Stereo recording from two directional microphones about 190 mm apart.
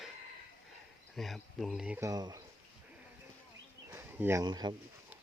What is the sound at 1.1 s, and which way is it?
Speech, centre (ahead or behind).